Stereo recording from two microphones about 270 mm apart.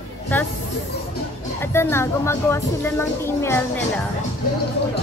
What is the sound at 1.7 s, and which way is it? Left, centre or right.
Speech, centre.